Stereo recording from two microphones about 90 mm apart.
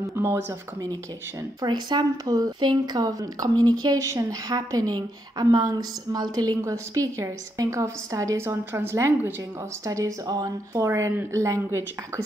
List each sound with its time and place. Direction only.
0.0 s speech: 30° right (ahead or behind)
1.6 s speech: 55° right (ahead or behind)
6.6 s a woman's voice: 35° right (ahead or behind)